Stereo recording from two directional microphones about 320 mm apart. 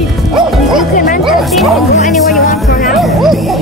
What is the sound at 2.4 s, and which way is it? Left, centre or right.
Speech, left.